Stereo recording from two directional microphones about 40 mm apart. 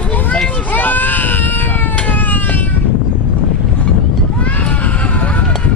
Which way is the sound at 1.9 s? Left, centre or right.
Left.